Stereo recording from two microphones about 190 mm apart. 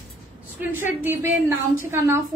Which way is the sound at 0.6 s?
10° right (ahead or behind).